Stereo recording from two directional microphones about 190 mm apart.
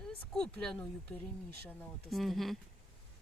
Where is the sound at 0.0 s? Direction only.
5° left (ahead or behind).